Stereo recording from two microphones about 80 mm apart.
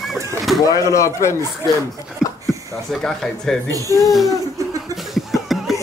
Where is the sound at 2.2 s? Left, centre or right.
Centre.